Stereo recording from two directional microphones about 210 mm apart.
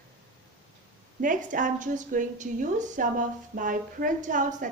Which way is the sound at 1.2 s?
40° right (ahead or behind).